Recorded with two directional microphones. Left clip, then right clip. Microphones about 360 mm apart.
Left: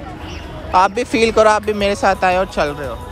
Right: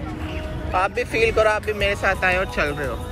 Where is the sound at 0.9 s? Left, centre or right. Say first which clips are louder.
Left 5 dB; left.